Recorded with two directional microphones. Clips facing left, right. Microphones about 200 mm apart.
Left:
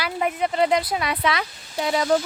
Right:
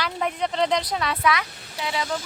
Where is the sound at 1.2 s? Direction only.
30° left (ahead or behind).